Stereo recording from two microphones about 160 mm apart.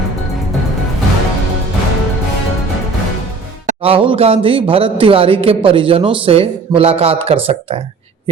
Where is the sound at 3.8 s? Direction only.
35° right (ahead or behind).